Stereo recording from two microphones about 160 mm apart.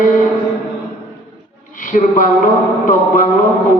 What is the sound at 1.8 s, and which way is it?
A man's voice, 60° left (ahead or behind).